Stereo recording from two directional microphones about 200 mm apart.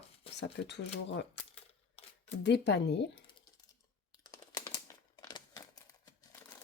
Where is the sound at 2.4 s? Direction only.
60° left (ahead or behind).